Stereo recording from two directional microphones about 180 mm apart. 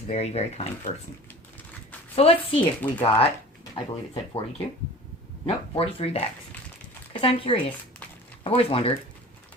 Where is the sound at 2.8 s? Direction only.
10° left (ahead or behind).